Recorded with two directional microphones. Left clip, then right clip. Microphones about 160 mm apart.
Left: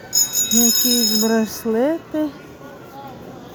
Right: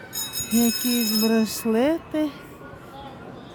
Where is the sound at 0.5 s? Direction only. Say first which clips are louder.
Left 5 dB; 20° right (ahead or behind).